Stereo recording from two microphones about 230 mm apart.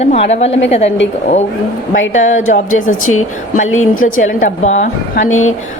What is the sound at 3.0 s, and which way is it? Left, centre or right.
Speech, left.